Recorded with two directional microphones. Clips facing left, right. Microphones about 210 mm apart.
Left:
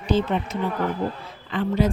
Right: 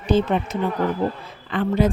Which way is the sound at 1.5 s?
55° right (ahead or behind).